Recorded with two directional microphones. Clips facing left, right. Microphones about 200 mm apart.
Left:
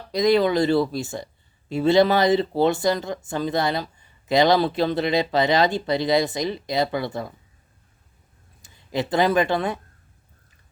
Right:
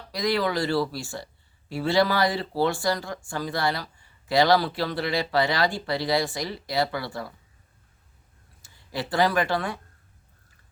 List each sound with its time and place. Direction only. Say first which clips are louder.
0.1 s speech: left 7 dB; 20° left (ahead or behind)
8.6 s speech: left 6 dB; 20° left (ahead or behind)